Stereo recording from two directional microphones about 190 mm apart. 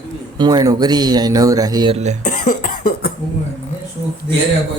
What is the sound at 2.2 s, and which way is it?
Cough, 45° left (ahead or behind).